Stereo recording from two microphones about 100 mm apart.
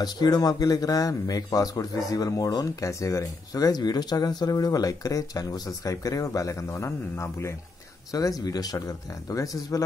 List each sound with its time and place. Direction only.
0.0 s speech: 45° left (ahead or behind)